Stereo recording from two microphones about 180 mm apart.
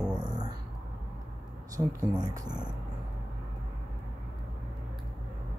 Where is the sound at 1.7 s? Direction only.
20° right (ahead or behind).